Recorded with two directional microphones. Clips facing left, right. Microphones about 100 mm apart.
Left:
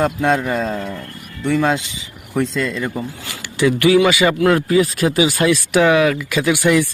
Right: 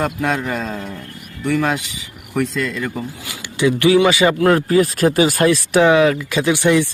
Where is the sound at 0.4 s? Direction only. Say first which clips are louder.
Left 3 dB; 5° left (ahead or behind).